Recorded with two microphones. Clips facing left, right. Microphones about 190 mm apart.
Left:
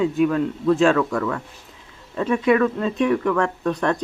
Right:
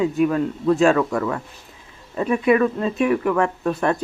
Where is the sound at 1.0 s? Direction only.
20° right (ahead or behind).